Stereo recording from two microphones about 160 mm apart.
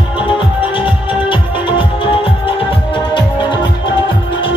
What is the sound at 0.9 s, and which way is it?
Music, 30° left (ahead or behind).